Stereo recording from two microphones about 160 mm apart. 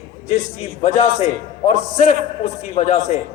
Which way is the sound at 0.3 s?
45° left (ahead or behind).